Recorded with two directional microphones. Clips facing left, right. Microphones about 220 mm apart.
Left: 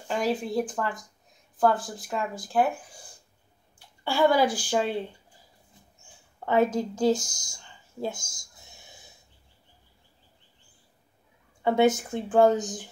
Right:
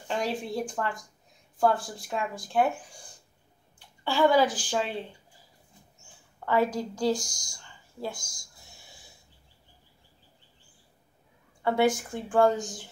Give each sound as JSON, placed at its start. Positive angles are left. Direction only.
{"t": 0.1, "sound": "speech", "side_deg": 0}
{"t": 4.0, "sound": "a woman's voice", "side_deg": 10}
{"t": 6.4, "sound": "speech", "side_deg": 20}
{"t": 8.4, "sound": "a sound", "side_deg": 20}
{"t": 11.6, "sound": "speech", "side_deg": 20}